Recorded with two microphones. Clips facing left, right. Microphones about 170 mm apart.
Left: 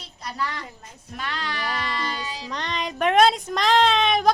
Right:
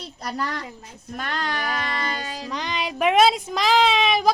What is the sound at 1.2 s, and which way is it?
Music, 50° right (ahead or behind).